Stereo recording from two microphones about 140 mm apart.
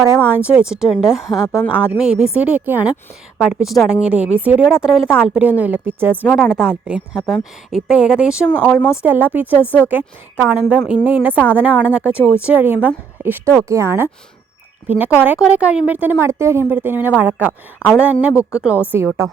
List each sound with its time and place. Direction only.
0.0 s a woman's voice: 15° right (ahead or behind)
6.2 s speech: centre (ahead or behind)
8.4 s speech: 10° left (ahead or behind)
9.0 s a woman's voice: 10° right (ahead or behind)
9.5 s speech: 15° left (ahead or behind)
9.9 s a woman's voice: 15° right (ahead or behind)